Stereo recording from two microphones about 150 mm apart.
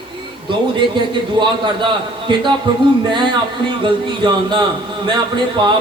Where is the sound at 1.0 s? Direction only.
30° right (ahead or behind).